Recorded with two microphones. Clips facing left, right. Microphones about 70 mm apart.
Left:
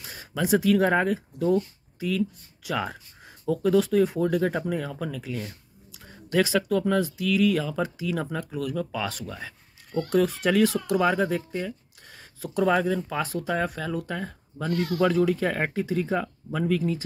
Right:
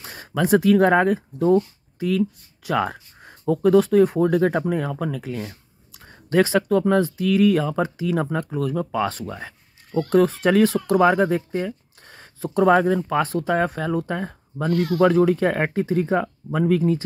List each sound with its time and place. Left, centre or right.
0.0 s speech: right